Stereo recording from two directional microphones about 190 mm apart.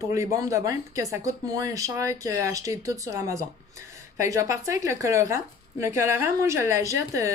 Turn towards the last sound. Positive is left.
turn(degrees=-15)  # may be behind; listen again after turning